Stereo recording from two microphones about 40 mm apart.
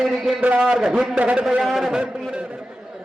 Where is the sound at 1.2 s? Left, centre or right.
Right.